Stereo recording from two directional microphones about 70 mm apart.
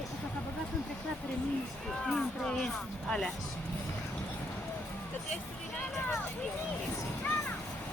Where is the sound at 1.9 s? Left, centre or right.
Centre.